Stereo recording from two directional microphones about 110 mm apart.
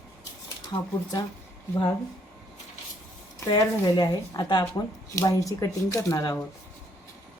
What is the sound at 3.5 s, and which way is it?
Speech, 40° left (ahead or behind).